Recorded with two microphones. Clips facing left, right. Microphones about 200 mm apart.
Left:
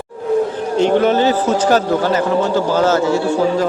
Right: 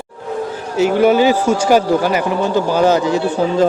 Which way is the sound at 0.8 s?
5° right (ahead or behind).